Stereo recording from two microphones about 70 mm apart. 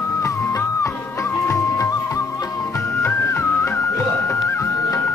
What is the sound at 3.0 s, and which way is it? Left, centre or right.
Music, left.